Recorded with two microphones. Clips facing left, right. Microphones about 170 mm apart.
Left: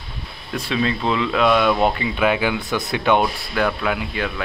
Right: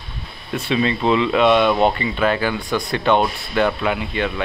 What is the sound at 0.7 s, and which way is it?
Speech, 5° right (ahead or behind).